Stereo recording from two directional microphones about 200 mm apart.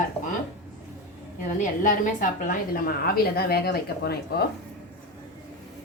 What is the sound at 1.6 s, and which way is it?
A woman's voice, 40° left (ahead or behind).